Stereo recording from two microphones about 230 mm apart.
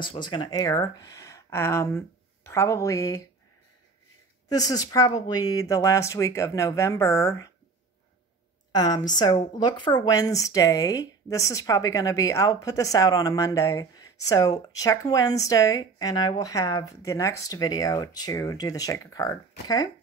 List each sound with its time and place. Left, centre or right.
0.0 s speech: left
4.5 s a woman's voice: centre
8.7 s a woman's voice: centre